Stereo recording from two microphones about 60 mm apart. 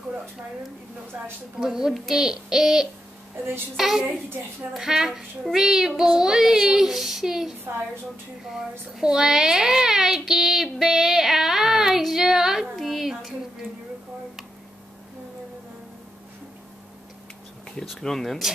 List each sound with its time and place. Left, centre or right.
1.6 s speech: centre
3.3 s a woman's voice: right
3.7 s speech: centre
8.5 s speech: centre
17.8 s speech: centre